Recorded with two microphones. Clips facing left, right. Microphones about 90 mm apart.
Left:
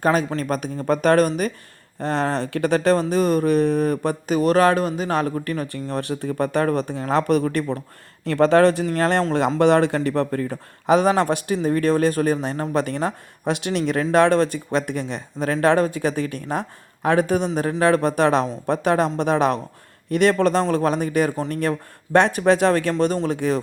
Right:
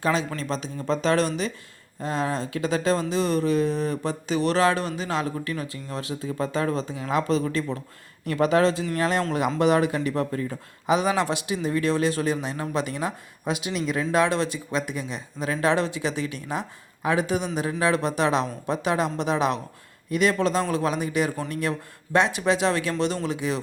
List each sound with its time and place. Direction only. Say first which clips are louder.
0.0 s speech: left 5 dB; 50° left (ahead or behind)
2.0 s speech: left 4 dB; 60° left (ahead or behind)
4.4 s speech: left 5 dB; 45° left (ahead or behind); by 7.8 s 60° left (ahead or behind)
8.2 s speech: left 5 dB; 70° left (ahead or behind); by 23.6 s 50° left (ahead or behind)